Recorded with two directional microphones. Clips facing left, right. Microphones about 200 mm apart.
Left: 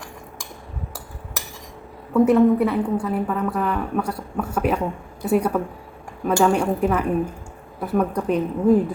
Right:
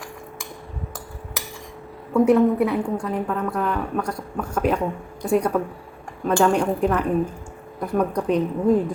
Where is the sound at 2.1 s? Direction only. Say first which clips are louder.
Left 1 dB; centre (ahead or behind).